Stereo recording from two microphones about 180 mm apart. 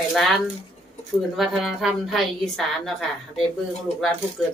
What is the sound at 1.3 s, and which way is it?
A woman's voice, centre (ahead or behind).